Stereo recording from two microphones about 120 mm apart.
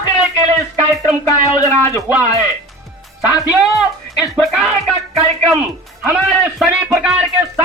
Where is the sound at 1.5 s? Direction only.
30° left (ahead or behind).